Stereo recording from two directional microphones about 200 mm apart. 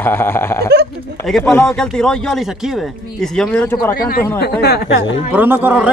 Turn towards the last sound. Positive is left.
turn(degrees=-10)  # may be behind; listen again after turning